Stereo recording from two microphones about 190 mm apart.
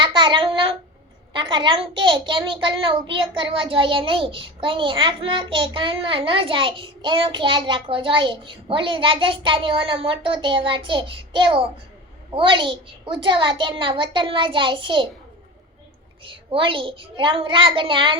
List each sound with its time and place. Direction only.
0.0 s a child's voice: 25° right (ahead or behind)
16.2 s a child's voice: 25° right (ahead or behind)